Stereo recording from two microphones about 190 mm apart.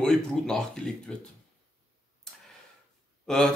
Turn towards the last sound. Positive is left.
turn(degrees=0)  # may be behind; listen again after turning